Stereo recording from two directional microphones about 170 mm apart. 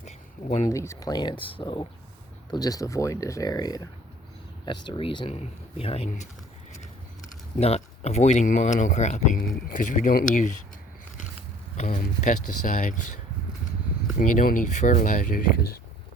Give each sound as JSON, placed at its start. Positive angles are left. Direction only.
{"t": 0.0, "sound": "a sound", "side_deg": 40}
{"t": 0.7, "sound": "speech", "side_deg": 20}
{"t": 7.6, "sound": "speech", "side_deg": 40}
{"t": 9.4, "sound": "speech", "side_deg": 55}
{"t": 11.8, "sound": "speech", "side_deg": 45}
{"t": 14.2, "sound": "speech", "side_deg": 50}